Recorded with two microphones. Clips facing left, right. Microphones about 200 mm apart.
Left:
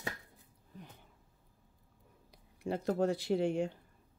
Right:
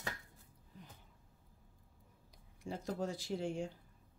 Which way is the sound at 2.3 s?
65° left (ahead or behind).